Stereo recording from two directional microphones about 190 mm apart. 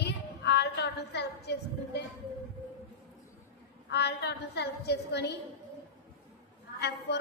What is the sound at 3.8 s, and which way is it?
A woman's voice, 60° left (ahead or behind).